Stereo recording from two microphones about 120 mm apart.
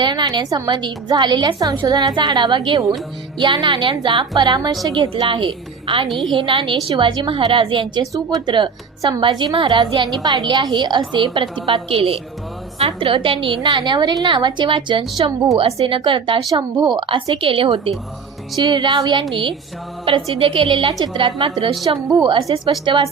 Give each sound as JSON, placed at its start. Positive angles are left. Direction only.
{"t": 0.0, "sound": "a woman's voice", "side_deg": -40}
{"t": 6.1, "sound": "a woman's voice", "side_deg": 0}
{"t": 6.3, "sound": "a woman's voice", "side_deg": -45}
{"t": 8.1, "sound": "a woman's voice", "side_deg": -35}
{"t": 18.5, "sound": "a woman's voice", "side_deg": -40}